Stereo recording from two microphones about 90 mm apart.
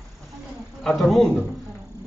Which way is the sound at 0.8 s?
Centre (ahead or behind).